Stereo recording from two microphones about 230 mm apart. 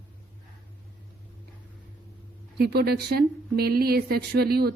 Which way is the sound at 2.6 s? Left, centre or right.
Right.